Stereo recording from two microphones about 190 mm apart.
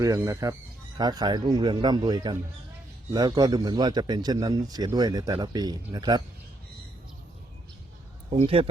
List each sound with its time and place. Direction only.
0.0 s a man's voice: 15° right (ahead or behind)
8.3 s speech: 30° right (ahead or behind)